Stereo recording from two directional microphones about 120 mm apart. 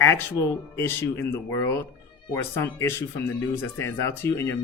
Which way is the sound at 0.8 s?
20° left (ahead or behind).